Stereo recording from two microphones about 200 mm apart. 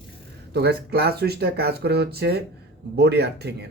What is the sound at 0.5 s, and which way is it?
Speech, 50° right (ahead or behind).